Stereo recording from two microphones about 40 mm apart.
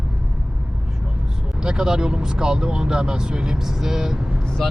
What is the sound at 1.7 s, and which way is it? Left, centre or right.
Speech, centre.